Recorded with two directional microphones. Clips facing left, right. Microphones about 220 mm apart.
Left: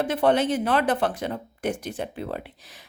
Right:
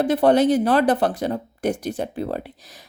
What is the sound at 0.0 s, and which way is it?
Speech, 40° right (ahead or behind).